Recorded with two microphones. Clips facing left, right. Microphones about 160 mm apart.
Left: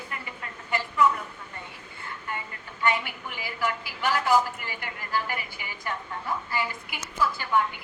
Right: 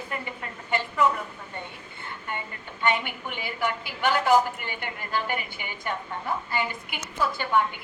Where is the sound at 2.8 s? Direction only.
25° right (ahead or behind).